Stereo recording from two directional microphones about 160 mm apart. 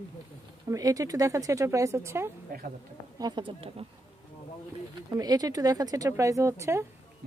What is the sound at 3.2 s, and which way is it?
Speech, 25° right (ahead or behind).